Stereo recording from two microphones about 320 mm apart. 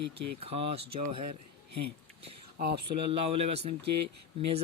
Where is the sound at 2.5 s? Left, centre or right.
Right.